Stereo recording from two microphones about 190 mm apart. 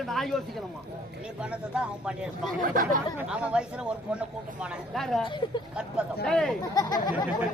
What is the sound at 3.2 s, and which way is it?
Speech, 5° right (ahead or behind).